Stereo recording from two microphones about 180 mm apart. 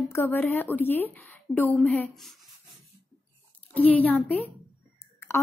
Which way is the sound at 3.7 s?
10° left (ahead or behind).